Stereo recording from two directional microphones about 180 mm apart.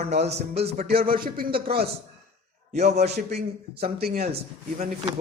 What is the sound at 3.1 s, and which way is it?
A man's voice, 65° right (ahead or behind).